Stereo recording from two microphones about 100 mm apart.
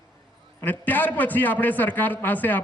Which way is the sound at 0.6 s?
20° left (ahead or behind).